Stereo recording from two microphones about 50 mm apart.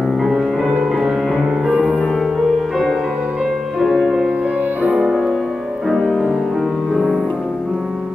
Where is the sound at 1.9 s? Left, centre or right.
Centre.